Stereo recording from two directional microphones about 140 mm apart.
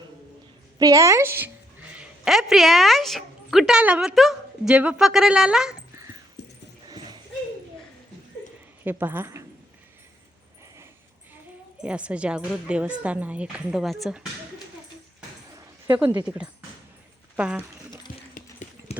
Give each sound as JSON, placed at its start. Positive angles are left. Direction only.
{"t": 0.8, "sound": "a woman's voice", "side_deg": -25}
{"t": 1.9, "sound": "a woman's voice", "side_deg": -5}
{"t": 6.8, "sound": "dog", "side_deg": -30}
{"t": 8.8, "sound": "speech", "side_deg": -15}
{"t": 11.8, "sound": "speech", "side_deg": -10}
{"t": 16.0, "sound": "speech", "side_deg": -10}
{"t": 18.1, "sound": "clip-clop", "side_deg": 70}
{"t": 18.9, "sound": "a sound", "side_deg": 50}